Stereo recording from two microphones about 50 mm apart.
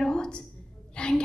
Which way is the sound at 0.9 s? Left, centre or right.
Centre.